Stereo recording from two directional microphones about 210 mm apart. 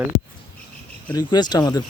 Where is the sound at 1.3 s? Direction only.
20° left (ahead or behind).